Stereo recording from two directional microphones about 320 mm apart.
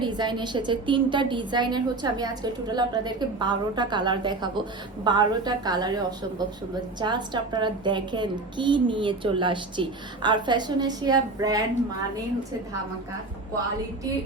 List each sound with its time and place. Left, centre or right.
0.0 s a woman's voice: centre